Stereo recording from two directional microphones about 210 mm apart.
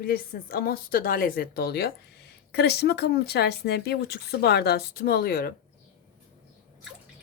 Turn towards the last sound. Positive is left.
turn(degrees=45)  # may be behind; listen again after turning